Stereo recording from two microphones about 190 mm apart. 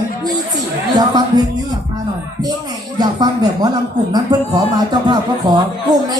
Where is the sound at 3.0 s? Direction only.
20° right (ahead or behind).